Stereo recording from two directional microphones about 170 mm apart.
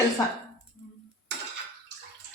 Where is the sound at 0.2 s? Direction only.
20° left (ahead or behind).